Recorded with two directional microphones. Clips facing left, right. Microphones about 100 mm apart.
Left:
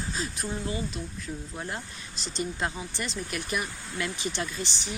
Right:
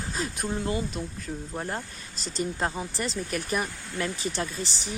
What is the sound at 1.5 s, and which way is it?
Speech, 35° right (ahead or behind).